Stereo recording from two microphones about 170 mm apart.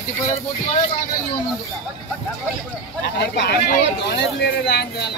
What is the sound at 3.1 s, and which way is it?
Speech, 80° left.